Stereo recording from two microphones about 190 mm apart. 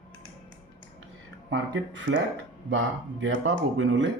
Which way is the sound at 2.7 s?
90° right.